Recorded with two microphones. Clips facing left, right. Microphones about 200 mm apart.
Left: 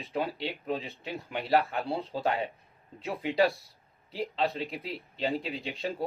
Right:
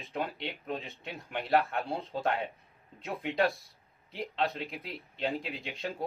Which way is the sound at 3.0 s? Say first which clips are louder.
Left 3 dB; centre (ahead or behind).